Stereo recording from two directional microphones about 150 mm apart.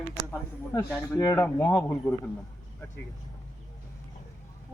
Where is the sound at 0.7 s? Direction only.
20° left (ahead or behind).